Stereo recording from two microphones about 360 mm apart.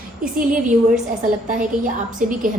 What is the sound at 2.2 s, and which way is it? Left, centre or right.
Speech, right.